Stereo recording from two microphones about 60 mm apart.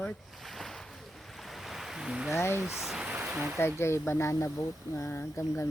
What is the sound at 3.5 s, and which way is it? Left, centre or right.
Speech, left.